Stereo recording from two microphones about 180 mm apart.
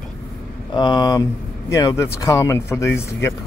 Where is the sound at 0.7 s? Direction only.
25° left (ahead or behind).